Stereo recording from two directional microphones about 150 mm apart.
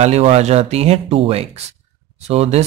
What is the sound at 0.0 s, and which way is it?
Speech, 45° right (ahead or behind).